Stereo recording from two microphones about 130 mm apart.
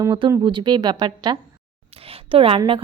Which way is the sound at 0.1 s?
30° right (ahead or behind).